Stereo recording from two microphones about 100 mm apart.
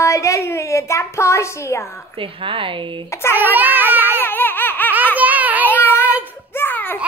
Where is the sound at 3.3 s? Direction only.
20° right (ahead or behind).